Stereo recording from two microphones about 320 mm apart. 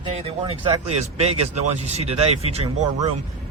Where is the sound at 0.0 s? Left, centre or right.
Centre.